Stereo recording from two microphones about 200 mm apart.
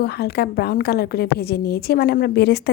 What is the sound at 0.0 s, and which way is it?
A woman's voice, 55° left (ahead or behind).